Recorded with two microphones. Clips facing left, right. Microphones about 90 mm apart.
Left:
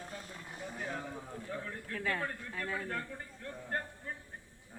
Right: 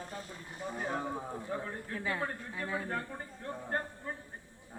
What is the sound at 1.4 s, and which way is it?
A man's voice, 25° right (ahead or behind).